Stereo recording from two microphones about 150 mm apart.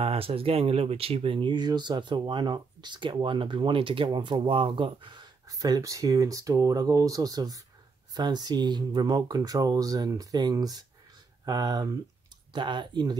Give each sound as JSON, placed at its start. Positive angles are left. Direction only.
{"t": 0.0, "sound": "speech", "side_deg": -40}